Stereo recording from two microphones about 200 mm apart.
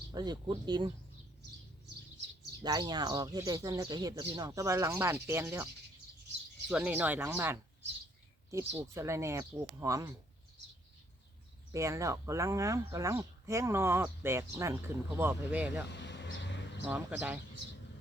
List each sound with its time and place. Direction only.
0.1 s speech: 20° right (ahead or behind)
2.6 s speech: 20° right (ahead or behind)
6.7 s speech: 5° right (ahead or behind)
11.7 s speech: 15° right (ahead or behind)
15.9 s a sound: 60° left (ahead or behind)
16.8 s speech: 5° right (ahead or behind)